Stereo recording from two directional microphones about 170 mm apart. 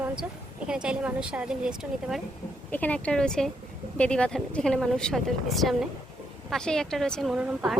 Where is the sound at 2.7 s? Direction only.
10° left (ahead or behind).